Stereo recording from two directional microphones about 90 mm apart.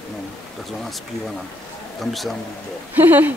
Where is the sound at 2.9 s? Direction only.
20° right (ahead or behind).